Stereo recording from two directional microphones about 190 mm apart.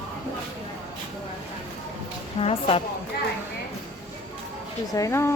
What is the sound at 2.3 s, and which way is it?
Speech, 30° left (ahead or behind).